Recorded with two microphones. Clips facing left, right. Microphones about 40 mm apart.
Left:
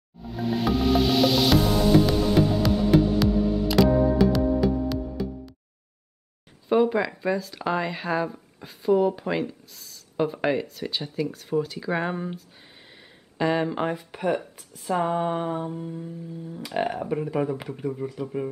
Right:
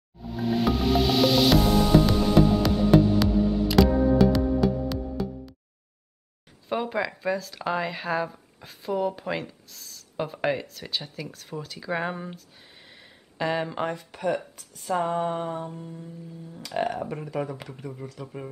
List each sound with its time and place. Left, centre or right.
0.2 s music: centre
6.7 s speech: centre
14.5 s a sound: centre
14.8 s speech: centre